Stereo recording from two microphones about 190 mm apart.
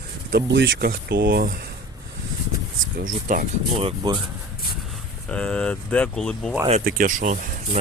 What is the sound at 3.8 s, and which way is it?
Speech, 25° right (ahead or behind).